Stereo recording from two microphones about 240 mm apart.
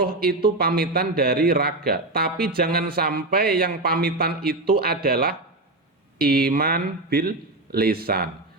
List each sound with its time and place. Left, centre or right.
0.0 s a man's voice: right